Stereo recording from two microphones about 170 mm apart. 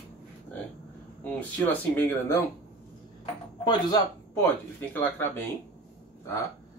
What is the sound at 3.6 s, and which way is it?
Speech, 25° left (ahead or behind).